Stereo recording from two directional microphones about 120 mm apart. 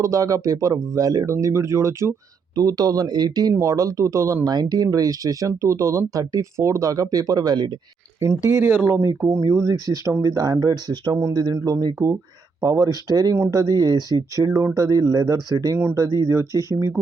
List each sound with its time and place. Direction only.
0.0 s speech: 25° right (ahead or behind)
8.4 s speech: 20° right (ahead or behind)
9.7 s speech: 35° left (ahead or behind)
10.0 s speech: 20° right (ahead or behind)
10.2 s speech: 30° right (ahead or behind)
16.5 s speech: 30° left (ahead or behind)